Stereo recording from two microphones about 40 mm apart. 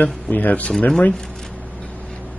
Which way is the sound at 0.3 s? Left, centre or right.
Left.